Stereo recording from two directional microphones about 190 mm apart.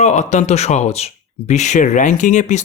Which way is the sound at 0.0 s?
35° left (ahead or behind).